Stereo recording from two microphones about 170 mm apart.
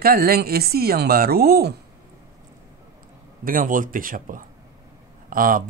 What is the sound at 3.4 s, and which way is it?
Speech, 55° right (ahead or behind).